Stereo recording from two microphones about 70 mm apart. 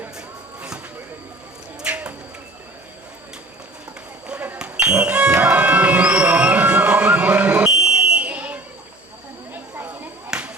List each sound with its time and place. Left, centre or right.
1.8 s bird: centre
4.5 s music: centre
7.8 s fire alarm: centre
9.5 s a sound: right
10.2 s whip: centre